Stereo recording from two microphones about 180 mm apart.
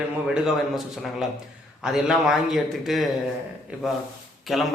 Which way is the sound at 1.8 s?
5° right (ahead or behind).